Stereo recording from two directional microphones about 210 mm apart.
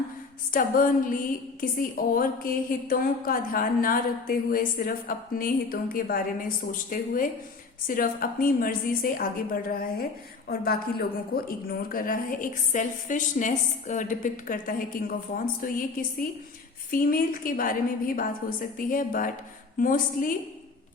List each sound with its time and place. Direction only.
0.5 s a woman's voice: 40° left (ahead or behind)